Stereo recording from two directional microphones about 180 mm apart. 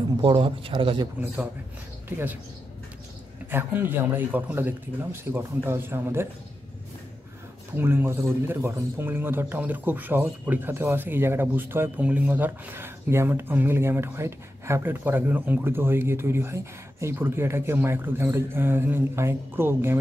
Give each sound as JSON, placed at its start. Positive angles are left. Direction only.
{"t": 0.2, "sound": "speech", "side_deg": -30}
{"t": 1.2, "sound": "speech", "side_deg": -10}
{"t": 3.4, "sound": "speech", "side_deg": -10}
{"t": 7.7, "sound": "speech", "side_deg": -10}